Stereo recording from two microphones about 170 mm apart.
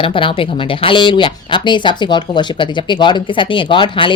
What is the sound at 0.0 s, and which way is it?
Speech, 30° left (ahead or behind).